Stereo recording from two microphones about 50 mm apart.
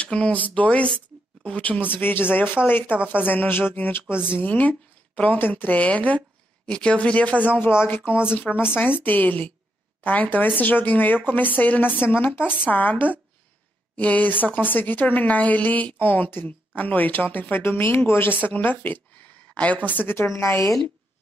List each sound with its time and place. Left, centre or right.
0.0 s a woman's voice: left
7.7 s speech: left
8.1 s speech: centre
8.4 s a woman's voice: left
18.4 s a woman's voice: left
20.2 s a woman's voice: left